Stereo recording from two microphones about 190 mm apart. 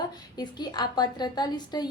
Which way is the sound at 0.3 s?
20° left (ahead or behind).